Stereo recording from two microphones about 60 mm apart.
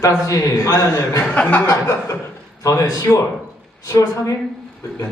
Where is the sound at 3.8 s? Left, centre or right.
Left.